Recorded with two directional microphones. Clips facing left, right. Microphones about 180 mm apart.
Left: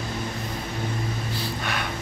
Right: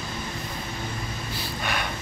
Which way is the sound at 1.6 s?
Centre (ahead or behind).